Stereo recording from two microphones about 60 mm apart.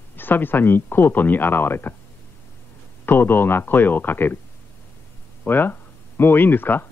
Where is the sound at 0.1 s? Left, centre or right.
Left.